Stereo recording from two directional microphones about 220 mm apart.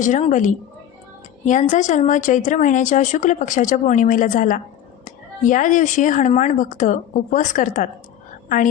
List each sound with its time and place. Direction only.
0.0 s speech: 35° left (ahead or behind)